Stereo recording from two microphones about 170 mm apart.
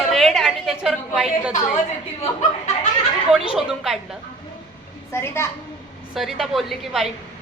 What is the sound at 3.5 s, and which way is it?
Speech, centre (ahead or behind).